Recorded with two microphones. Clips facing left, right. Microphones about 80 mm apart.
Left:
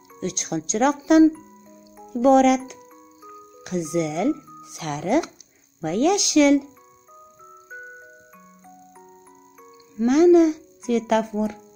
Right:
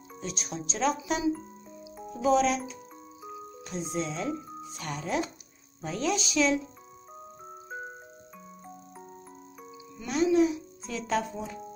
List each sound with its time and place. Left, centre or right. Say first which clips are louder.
0.2 s speech: left 9 dB; left
2.1 s speech: left 9 dB; left
3.6 s speech: left 9 dB; left
9.9 s a child's voice: left 10 dB; left